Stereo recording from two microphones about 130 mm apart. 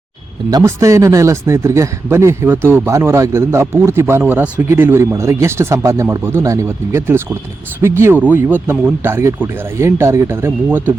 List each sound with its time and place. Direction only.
0.5 s a man's voice: 25° right (ahead or behind)